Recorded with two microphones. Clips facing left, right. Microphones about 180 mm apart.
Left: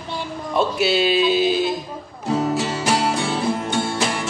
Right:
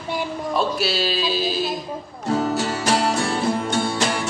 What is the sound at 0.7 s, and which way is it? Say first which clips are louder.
Speech: left 5 dB; 20° left (ahead or behind).